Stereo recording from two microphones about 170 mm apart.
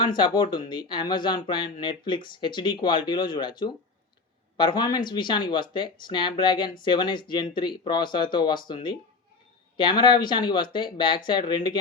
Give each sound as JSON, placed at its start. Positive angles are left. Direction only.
{"t": 0.2, "sound": "speech", "side_deg": 25}